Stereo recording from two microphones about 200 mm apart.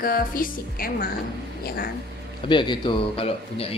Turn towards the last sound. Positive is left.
turn(degrees=25)  # may be behind; listen again after turning